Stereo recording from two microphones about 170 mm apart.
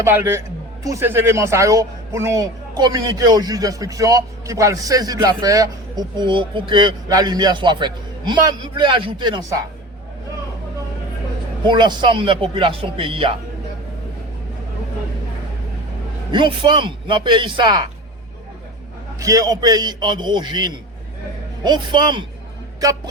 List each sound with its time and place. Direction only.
0.0 s a man's voice: 15° right (ahead or behind)
11.6 s speech: 25° right (ahead or behind)
16.3 s a man's voice: 30° right (ahead or behind)
19.2 s a man's voice: 20° right (ahead or behind)